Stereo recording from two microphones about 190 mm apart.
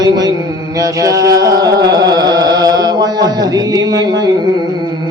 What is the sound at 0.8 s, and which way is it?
Music, 15° right (ahead or behind).